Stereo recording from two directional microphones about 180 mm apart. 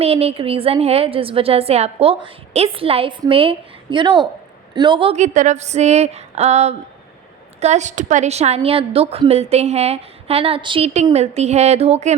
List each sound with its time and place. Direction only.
0.0 s a woman's voice: 35° right (ahead or behind)